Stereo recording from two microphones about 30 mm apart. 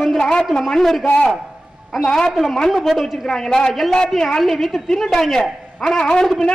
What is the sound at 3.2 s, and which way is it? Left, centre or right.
Speech, centre.